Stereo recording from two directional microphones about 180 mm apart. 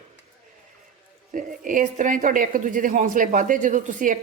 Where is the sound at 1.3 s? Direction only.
45° right (ahead or behind).